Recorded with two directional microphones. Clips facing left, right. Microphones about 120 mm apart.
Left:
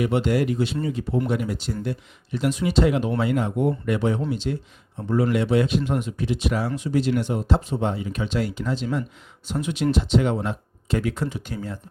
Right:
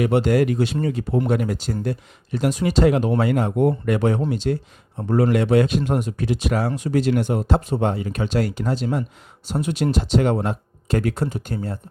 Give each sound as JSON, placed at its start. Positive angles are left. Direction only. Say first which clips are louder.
{"t": 0.2, "sound": "speech", "louder": "right 3 dB", "side_deg": -50}